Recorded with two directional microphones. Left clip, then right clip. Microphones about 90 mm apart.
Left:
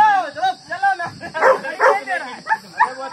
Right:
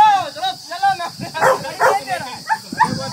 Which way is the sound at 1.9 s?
20° right (ahead or behind).